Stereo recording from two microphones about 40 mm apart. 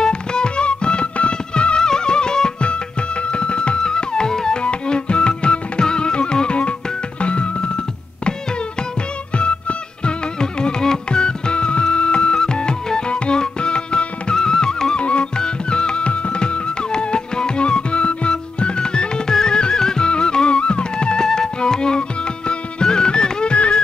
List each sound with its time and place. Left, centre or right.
0.0 s music: left
9.4 s music: left